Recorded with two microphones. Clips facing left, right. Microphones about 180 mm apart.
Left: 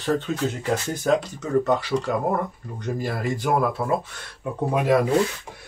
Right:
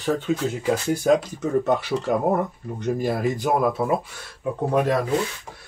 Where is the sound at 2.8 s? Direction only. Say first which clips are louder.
Right 4 dB; 20° right (ahead or behind).